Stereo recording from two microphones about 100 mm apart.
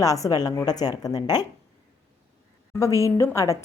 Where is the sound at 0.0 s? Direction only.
35° left (ahead or behind).